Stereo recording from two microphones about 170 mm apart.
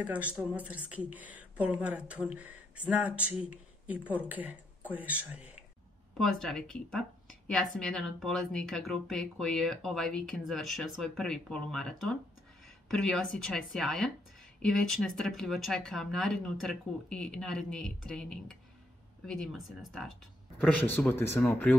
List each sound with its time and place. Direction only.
0.0 s speech: 10° right (ahead or behind)
6.1 s speech: 5° left (ahead or behind)